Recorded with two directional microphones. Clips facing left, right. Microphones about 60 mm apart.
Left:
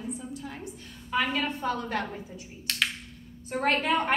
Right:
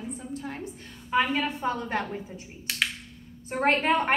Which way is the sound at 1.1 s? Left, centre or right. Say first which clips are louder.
Right 3 dB; right.